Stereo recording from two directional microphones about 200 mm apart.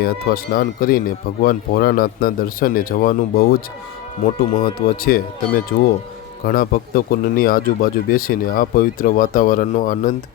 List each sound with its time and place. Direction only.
0.0 s speech: 45° left (ahead or behind)
4.6 s speech: 45° left (ahead or behind)